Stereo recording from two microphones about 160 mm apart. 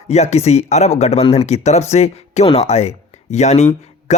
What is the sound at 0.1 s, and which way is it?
Speech, 45° left (ahead or behind).